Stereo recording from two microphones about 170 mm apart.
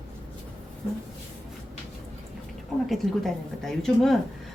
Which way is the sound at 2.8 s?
Centre (ahead or behind).